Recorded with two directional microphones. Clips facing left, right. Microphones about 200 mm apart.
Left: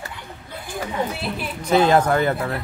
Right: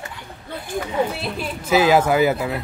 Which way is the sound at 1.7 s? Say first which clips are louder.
Right 1 dB; 5° right (ahead or behind).